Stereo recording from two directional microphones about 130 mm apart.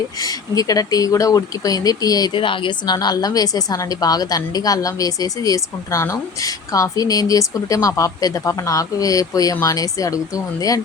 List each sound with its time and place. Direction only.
0.2 s speech: 30° left (ahead or behind)